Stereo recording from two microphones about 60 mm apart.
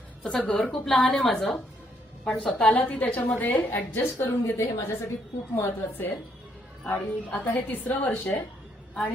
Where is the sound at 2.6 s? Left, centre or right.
Centre.